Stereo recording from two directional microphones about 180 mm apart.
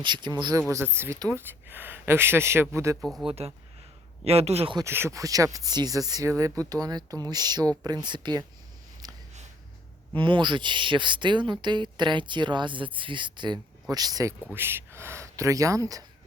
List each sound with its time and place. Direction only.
0.0 s speech: 25° right (ahead or behind)
3.0 s speech: centre (ahead or behind)
3.2 s speech: 35° right (ahead or behind)
4.8 s speech: 15° right (ahead or behind)
10.2 s speech: 25° right (ahead or behind)